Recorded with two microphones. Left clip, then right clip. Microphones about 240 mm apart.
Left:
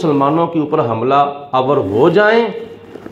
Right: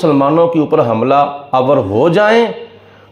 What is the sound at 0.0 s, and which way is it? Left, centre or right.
A man's voice, right.